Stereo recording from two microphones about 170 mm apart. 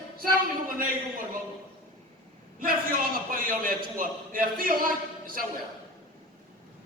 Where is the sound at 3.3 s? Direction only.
55° right (ahead or behind).